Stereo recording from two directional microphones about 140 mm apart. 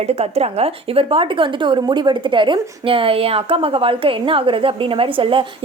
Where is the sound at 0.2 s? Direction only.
45° right (ahead or behind).